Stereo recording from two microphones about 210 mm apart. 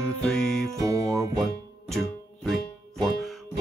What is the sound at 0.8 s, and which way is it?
Music, 15° right (ahead or behind).